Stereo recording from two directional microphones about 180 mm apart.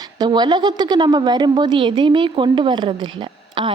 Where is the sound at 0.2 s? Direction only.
25° right (ahead or behind).